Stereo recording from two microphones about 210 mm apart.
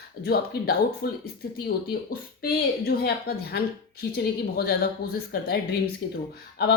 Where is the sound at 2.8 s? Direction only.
50° left (ahead or behind).